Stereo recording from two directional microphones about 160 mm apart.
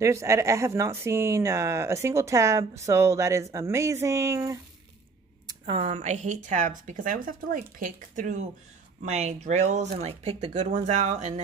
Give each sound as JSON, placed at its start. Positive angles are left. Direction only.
{"t": 0.0, "sound": "speech", "side_deg": -20}
{"t": 5.5, "sound": "a woman's voice", "side_deg": -35}